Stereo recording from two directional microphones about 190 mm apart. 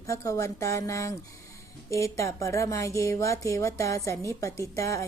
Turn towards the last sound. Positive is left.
turn(degrees=15)  # may be behind; listen again after turning